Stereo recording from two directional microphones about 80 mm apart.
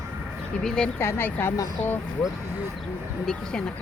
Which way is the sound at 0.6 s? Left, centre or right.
Centre.